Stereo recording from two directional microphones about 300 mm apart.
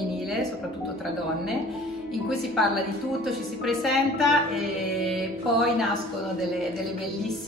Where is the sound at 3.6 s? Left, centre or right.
Centre.